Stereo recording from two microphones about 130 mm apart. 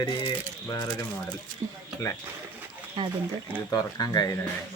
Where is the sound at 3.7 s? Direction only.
30° left (ahead or behind).